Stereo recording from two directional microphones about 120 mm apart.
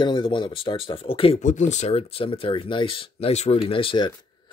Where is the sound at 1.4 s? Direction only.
90° left; by 3.3 s 50° left (ahead or behind).